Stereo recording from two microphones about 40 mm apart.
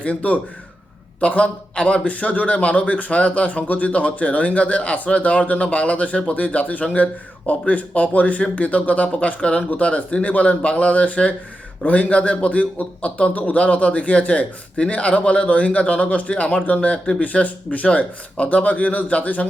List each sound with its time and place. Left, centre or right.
0.0 s a man's voice: left